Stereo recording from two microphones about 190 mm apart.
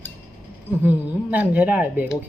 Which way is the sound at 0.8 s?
10° right (ahead or behind).